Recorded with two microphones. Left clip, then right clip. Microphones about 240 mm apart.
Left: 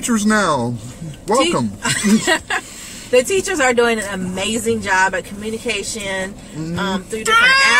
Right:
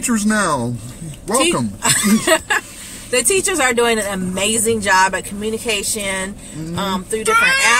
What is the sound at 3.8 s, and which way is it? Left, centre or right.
Speech, centre.